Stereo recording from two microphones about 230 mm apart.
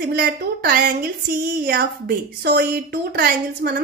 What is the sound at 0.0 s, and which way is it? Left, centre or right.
A woman's voice, right.